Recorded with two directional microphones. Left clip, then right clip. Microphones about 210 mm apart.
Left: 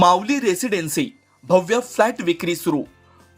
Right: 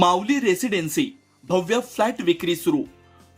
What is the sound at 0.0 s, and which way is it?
Speech, 25° left (ahead or behind).